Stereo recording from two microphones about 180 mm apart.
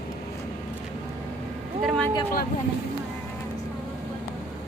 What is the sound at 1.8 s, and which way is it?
Speech, centre (ahead or behind).